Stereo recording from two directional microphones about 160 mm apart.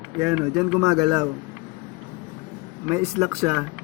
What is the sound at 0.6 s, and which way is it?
Speech, 5° right (ahead or behind).